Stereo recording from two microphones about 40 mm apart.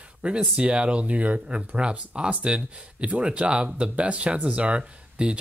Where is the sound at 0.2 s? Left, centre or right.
Right.